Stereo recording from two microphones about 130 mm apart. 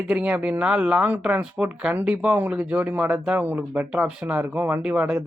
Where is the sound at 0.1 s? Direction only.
10° right (ahead or behind).